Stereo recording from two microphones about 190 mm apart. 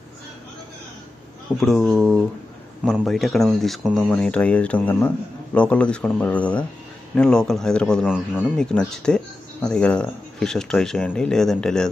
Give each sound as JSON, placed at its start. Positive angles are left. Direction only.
{"t": 1.6, "sound": "speech", "side_deg": 0}